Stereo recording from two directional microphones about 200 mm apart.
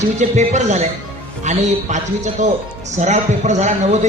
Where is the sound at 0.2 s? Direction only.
35° right (ahead or behind).